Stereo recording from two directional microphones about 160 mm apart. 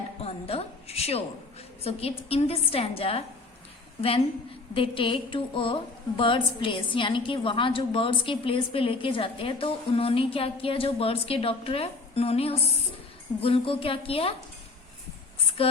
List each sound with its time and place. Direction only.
0.2 s a sound: 40° left (ahead or behind)
1.8 s a woman's voice: 40° left (ahead or behind)
4.7 s a woman's voice: 35° left (ahead or behind)
15.6 s a woman's voice: 35° left (ahead or behind)